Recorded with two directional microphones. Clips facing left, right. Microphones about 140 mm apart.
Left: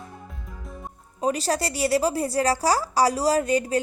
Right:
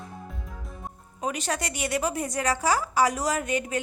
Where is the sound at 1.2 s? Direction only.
35° left (ahead or behind).